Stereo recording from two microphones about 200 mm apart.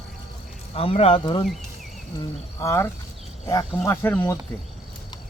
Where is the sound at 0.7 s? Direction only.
30° left (ahead or behind).